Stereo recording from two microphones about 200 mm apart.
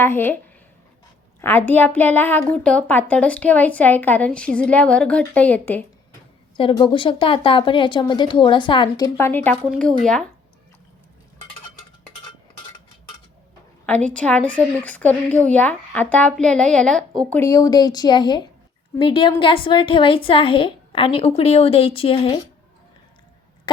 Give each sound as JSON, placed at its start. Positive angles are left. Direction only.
{"t": 0.0, "sound": "a woman's voice", "side_deg": 10}
{"t": 1.4, "sound": "a woman's voice", "side_deg": 10}
{"t": 6.6, "sound": "a woman's voice", "side_deg": 25}
{"t": 9.1, "sound": "speech", "side_deg": 10}
{"t": 13.8, "sound": "a woman's voice", "side_deg": 5}